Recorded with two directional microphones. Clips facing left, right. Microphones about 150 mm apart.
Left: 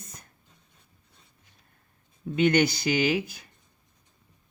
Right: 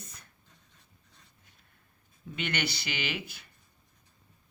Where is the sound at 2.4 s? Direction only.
40° left (ahead or behind).